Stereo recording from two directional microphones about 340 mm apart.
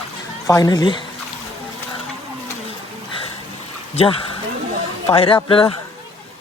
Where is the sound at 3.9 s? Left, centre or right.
Centre.